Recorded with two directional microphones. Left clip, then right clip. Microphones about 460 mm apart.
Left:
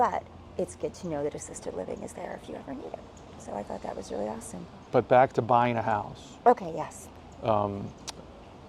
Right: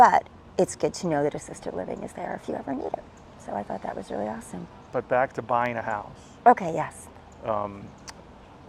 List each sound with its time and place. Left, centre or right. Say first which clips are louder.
0.0 s speech: right 10 dB; right
4.9 s speech: left 3 dB; left
6.4 s a woman's voice: right 4 dB; right
7.4 s speech: left 2 dB; left